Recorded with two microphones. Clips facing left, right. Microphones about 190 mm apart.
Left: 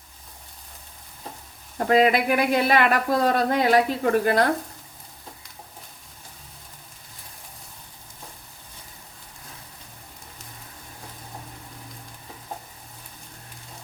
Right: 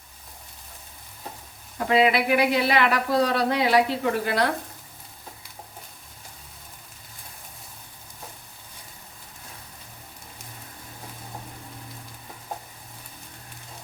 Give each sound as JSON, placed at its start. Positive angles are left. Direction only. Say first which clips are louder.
{"t": 1.9, "sound": "speech", "louder": "left 1 dB", "side_deg": 45}